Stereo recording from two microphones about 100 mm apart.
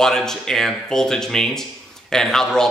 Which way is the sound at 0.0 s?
5° left (ahead or behind).